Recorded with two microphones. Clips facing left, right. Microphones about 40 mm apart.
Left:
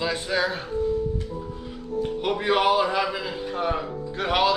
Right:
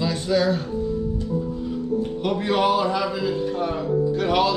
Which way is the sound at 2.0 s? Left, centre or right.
Centre.